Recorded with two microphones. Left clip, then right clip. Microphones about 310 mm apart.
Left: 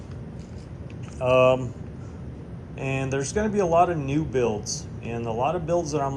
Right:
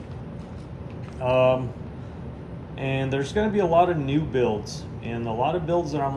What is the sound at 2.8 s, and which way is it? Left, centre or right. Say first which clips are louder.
Speech: right 1 dB; centre.